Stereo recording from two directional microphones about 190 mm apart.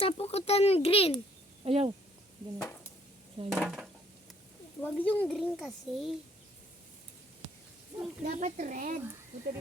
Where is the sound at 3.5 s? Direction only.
Centre (ahead or behind).